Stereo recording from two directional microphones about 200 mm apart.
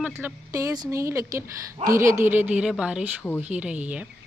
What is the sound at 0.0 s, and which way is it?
Speech, 10° right (ahead or behind).